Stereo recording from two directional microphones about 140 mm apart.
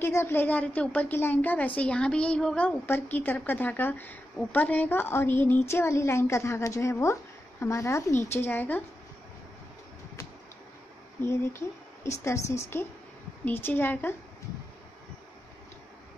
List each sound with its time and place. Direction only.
0.0 s a woman's voice: 15° left (ahead or behind)
11.1 s a woman's voice: 20° left (ahead or behind)